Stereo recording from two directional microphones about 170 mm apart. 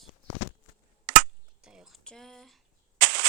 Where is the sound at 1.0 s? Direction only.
70° right (ahead or behind).